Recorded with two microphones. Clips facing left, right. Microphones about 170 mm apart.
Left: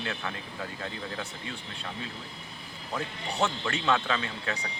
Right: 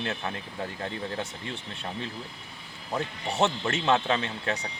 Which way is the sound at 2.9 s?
25° right (ahead or behind).